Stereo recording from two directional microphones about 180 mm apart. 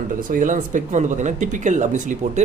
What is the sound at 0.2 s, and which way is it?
Speech, 45° right (ahead or behind).